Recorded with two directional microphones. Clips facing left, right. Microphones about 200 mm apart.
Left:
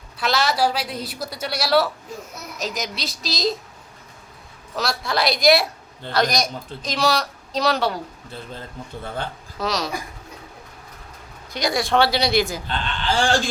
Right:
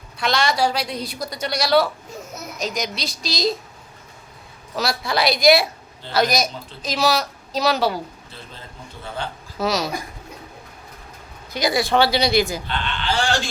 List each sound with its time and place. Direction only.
0.2 s a woman's voice: 5° left (ahead or behind)
4.7 s a woman's voice: centre (ahead or behind)
9.6 s speech: 5° right (ahead or behind)
11.5 s a woman's voice: centre (ahead or behind)
12.6 s speech: 50° left (ahead or behind)